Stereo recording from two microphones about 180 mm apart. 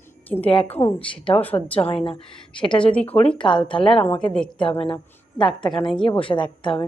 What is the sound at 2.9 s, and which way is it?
Speech, 10° left (ahead or behind).